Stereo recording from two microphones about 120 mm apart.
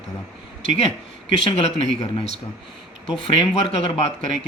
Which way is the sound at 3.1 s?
40° left (ahead or behind).